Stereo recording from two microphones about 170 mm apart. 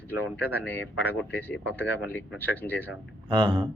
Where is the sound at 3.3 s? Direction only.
30° right (ahead or behind).